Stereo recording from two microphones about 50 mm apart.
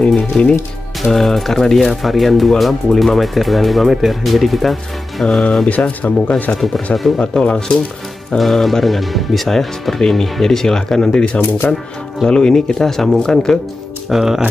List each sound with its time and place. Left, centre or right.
0.3 s speech: centre
1.0 s speech: centre
5.2 s speech: centre
5.7 s speech: left
7.2 s speech: centre
8.4 s speech: centre; by 11.8 s left
12.3 s speech: centre
14.0 s speech: centre